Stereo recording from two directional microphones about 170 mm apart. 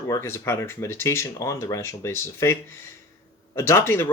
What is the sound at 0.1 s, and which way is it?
Speech, 15° left (ahead or behind).